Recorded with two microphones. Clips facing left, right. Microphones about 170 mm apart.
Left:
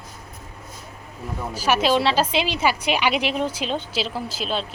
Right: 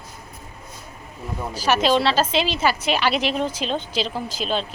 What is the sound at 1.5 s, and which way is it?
A woman's voice, 10° left (ahead or behind).